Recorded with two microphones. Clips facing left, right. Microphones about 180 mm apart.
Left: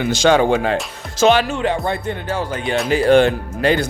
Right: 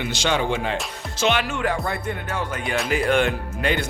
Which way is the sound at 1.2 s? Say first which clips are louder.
Left 7 dB; 35° left (ahead or behind).